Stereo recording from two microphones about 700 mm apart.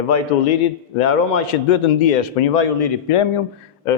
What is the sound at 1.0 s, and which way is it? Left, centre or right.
A man's voice, left.